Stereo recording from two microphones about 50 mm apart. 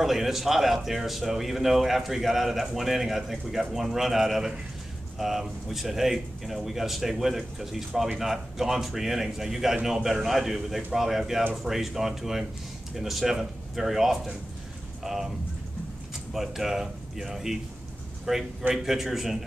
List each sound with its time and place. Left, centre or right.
0.0 s a man's voice: centre
16.3 s a man's voice: centre